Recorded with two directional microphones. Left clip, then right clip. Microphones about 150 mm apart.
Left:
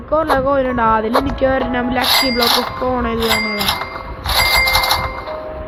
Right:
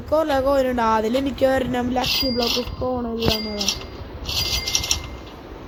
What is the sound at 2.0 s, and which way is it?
Speech, 5° right (ahead or behind).